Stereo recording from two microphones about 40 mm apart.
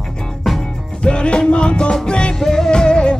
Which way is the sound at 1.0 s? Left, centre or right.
Left.